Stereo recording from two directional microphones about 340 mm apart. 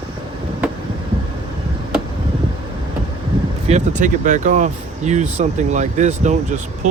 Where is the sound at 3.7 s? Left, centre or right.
Right.